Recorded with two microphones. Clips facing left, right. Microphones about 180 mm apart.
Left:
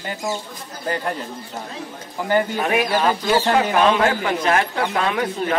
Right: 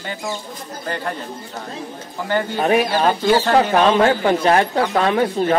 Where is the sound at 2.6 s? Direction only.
30° right (ahead or behind).